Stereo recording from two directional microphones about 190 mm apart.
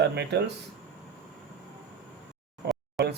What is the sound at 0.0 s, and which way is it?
Speech, 60° right (ahead or behind).